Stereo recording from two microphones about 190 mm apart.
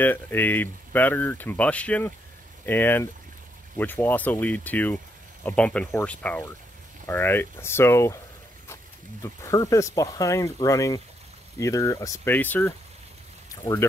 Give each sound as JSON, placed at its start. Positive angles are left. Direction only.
{"t": 0.0, "sound": "speech", "side_deg": 10}
{"t": 9.2, "sound": "speech", "side_deg": 15}